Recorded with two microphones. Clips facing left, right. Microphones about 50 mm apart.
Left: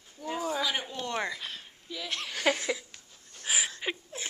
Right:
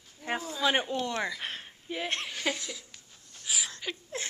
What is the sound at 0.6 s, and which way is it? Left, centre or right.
Speech, right.